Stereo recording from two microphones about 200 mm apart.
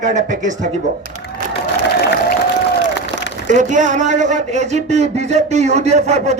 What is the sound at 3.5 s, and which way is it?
A man's voice, 40° right (ahead or behind).